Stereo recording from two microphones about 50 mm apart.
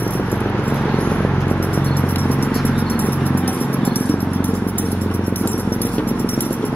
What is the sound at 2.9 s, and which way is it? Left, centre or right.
Music, left.